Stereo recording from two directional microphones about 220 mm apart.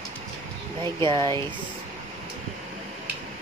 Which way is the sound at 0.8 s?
20° right (ahead or behind).